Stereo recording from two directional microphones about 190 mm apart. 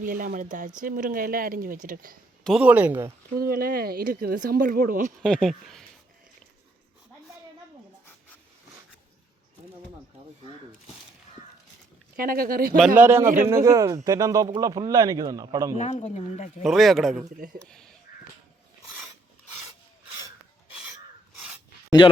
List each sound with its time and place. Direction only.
0.0 s speech: 45° right (ahead or behind)
2.4 s speech: 5° right (ahead or behind)
3.3 s speech: 50° right (ahead or behind)
5.2 s speech: 5° left (ahead or behind)
12.1 s speech: 50° right (ahead or behind)
13.0 s speech: 10° right (ahead or behind)
15.8 s speech: 30° left (ahead or behind)
16.6 s speech: centre (ahead or behind)
18.1 s crow: 45° left (ahead or behind)
21.4 s a sound: 5° right (ahead or behind)